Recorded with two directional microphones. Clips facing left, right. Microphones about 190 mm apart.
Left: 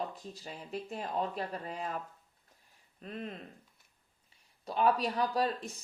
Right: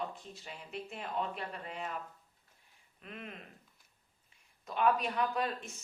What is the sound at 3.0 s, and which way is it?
Speech, 35° left (ahead or behind).